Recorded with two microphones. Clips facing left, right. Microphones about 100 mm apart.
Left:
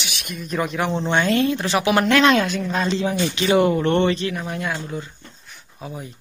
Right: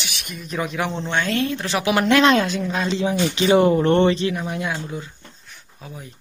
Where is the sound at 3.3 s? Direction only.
25° right (ahead or behind).